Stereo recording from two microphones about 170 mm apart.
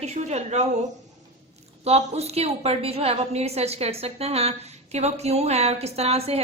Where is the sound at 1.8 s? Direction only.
40° right (ahead or behind).